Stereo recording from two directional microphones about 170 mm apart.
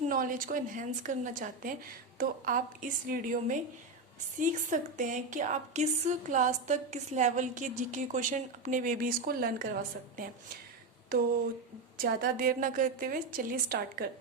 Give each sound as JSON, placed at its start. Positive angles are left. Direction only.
{"t": 0.1, "sound": "a woman's voice", "side_deg": -55}